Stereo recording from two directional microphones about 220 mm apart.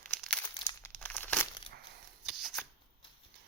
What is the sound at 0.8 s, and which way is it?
Crumpling, 10° left (ahead or behind).